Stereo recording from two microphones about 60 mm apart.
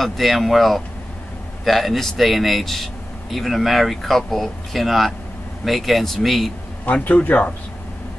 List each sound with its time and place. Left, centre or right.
0.0 s speech: centre
6.9 s speech: left